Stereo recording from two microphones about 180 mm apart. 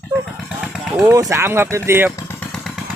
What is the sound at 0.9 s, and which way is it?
Speech, 5° right (ahead or behind).